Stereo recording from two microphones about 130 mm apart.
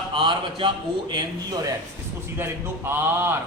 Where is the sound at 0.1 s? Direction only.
40° right (ahead or behind).